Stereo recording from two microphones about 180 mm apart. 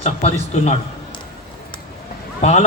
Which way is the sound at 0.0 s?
35° left (ahead or behind).